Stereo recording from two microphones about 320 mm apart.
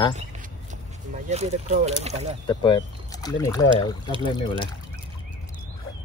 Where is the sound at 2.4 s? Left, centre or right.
Centre.